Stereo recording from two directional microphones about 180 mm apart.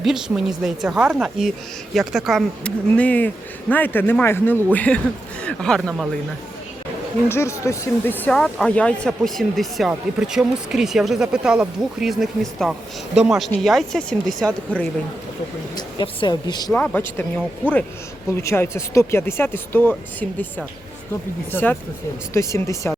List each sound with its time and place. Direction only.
0.0 s a woman's voice: centre (ahead or behind)
7.3 s a woman's voice: 15° left (ahead or behind)
15.7 s speech: 25° left (ahead or behind)
16.7 s a woman's voice: 10° left (ahead or behind)
18.3 s a woman's voice: 15° left (ahead or behind)
21.5 s a woman's voice: 10° left (ahead or behind)